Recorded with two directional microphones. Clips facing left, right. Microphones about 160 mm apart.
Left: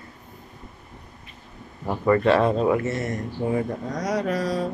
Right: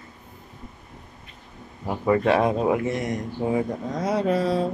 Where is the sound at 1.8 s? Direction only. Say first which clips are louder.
Left 1 dB; 10° right (ahead or behind); by 4.6 s 30° right (ahead or behind).